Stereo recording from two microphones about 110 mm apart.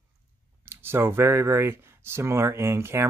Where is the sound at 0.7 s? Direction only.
20° right (ahead or behind).